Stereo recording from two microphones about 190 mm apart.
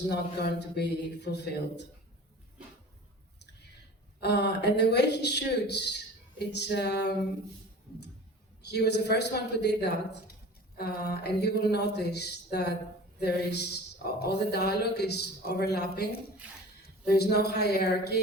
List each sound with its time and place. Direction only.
0.1 s speech: 60° left (ahead or behind)
4.2 s speech: 60° left (ahead or behind)
8.6 s speech: 60° left (ahead or behind)